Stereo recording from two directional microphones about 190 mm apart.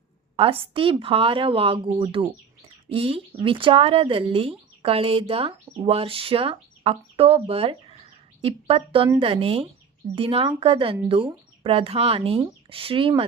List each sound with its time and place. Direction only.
0.3 s speech: 30° right (ahead or behind)